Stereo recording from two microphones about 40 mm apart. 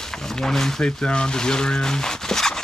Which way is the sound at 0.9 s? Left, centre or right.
Left.